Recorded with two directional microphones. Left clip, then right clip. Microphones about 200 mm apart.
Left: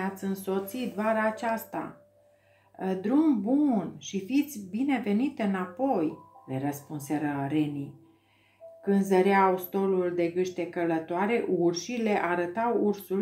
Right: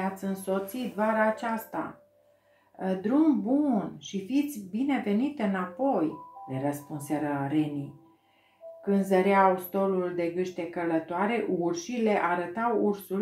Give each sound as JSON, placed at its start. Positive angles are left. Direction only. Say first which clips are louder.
{"t": 0.0, "sound": "speech", "louder": "right 1 dB", "side_deg": 25}
{"t": 2.8, "sound": "speech", "louder": "even", "side_deg": 25}
{"t": 8.8, "sound": "speech", "louder": "left 1 dB", "side_deg": 25}